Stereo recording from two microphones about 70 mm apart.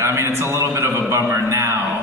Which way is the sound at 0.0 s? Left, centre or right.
Right.